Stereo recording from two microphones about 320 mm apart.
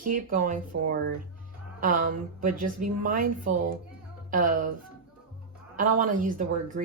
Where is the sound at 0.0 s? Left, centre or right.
Right.